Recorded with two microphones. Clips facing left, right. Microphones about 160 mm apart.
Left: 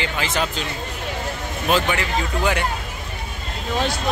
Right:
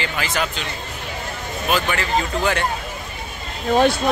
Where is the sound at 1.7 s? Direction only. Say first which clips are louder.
Even; 15° left (ahead or behind).